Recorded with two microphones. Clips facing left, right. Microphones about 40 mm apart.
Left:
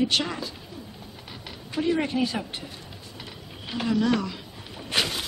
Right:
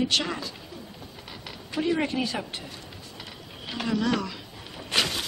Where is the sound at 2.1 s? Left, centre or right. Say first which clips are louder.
Left 3 dB; centre.